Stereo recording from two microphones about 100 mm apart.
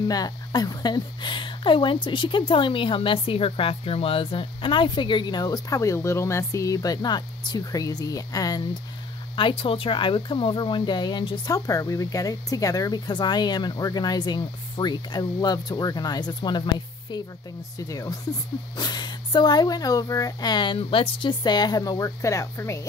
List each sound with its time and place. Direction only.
0.1 s speech: 40° left (ahead or behind)
9.3 s speech: 60° left (ahead or behind)
17.7 s speech: 35° left (ahead or behind)